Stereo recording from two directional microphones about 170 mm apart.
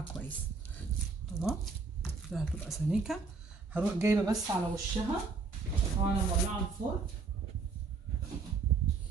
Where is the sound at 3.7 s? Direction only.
10° right (ahead or behind).